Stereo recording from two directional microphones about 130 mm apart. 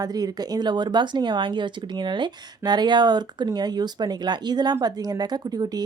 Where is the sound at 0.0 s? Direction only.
30° right (ahead or behind).